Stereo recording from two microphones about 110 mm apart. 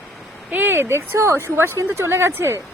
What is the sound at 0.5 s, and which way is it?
Speech, 20° right (ahead or behind).